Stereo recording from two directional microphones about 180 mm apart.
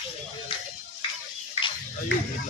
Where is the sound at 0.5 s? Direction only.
30° left (ahead or behind).